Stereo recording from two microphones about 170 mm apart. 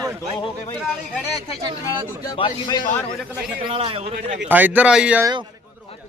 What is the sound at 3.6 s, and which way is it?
Speech, 30° right (ahead or behind).